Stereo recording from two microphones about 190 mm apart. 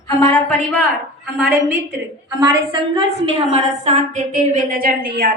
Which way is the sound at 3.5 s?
40° right (ahead or behind).